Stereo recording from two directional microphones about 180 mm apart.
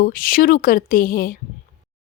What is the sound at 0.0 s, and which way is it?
Speech, 50° left (ahead or behind).